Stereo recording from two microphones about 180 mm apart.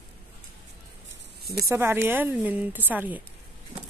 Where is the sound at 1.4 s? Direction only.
60° right (ahead or behind).